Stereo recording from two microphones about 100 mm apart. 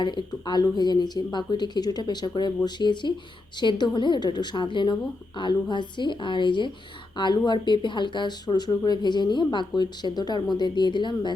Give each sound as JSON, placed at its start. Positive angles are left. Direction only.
{"t": 0.0, "sound": "speech", "side_deg": 50}